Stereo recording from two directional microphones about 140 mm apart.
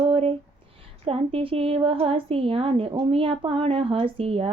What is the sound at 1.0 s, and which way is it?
A woman's voice, 45° right (ahead or behind).